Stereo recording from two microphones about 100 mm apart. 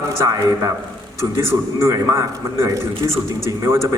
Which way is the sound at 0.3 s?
40° right (ahead or behind).